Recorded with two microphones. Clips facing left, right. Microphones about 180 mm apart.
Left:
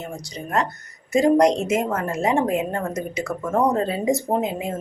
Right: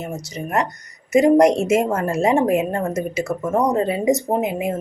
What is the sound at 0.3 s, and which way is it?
Speech, 20° right (ahead or behind).